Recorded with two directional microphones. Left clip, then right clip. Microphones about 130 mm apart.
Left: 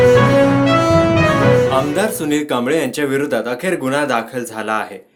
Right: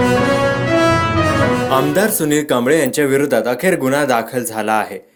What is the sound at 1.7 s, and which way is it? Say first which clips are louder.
Speech: right 2 dB; 40° right (ahead or behind).